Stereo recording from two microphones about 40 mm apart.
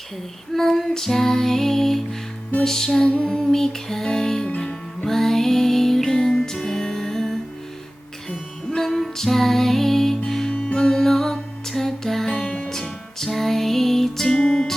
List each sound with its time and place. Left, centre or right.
0.5 s female singing: centre
4.4 s music: left
5.0 s music: centre
10.5 s music: left
10.8 s music: centre
12.5 s music: left
12.7 s music: centre